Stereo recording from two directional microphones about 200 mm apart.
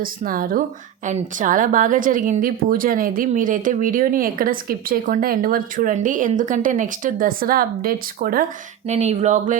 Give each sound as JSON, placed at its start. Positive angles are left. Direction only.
{"t": 0.0, "sound": "a woman's voice", "side_deg": -45}
{"t": 8.9, "sound": "speech", "side_deg": -35}